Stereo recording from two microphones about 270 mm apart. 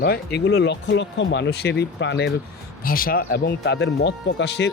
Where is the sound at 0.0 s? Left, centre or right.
Left.